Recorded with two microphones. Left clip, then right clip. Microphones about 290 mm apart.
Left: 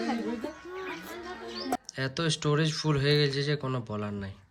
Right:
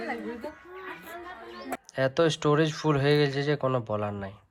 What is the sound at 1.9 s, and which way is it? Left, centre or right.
Speech, centre.